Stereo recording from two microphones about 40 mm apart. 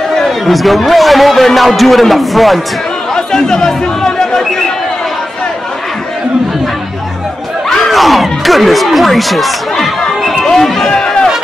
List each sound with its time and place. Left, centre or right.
0.2 s a man's voice: centre
3.2 s chatter: centre
7.9 s speech: centre
10.2 s a sound: centre
10.5 s run: centre
10.9 s a sound: centre